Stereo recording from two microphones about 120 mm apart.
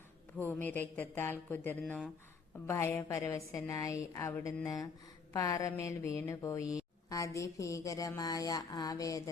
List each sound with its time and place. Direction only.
0.3 s a woman's voice: 15° left (ahead or behind)